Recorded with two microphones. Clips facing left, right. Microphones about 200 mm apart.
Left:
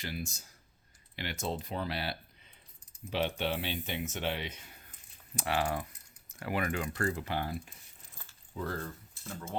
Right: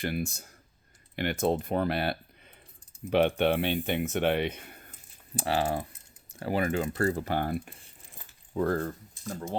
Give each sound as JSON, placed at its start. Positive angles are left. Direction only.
{"t": 0.0, "sound": "speech", "side_deg": -55}
{"t": 5.4, "sound": "speech", "side_deg": -30}
{"t": 7.0, "sound": "speech", "side_deg": -40}